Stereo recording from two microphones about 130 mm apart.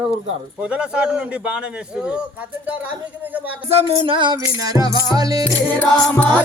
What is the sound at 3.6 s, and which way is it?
Music, 40° right (ahead or behind).